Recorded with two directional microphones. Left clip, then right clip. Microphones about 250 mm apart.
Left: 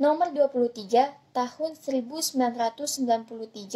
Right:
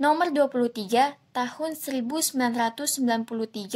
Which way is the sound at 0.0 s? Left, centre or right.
Centre.